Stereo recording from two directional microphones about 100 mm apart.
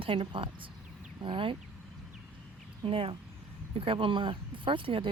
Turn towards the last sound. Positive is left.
turn(degrees=-60)  # may be behind; listen again after turning